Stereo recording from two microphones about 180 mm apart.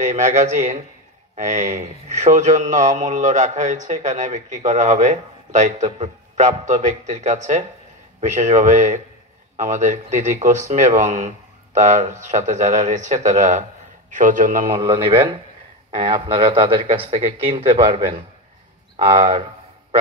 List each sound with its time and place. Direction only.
0.1 s speech: 45° right (ahead or behind)
14.7 s a man's voice: 30° right (ahead or behind)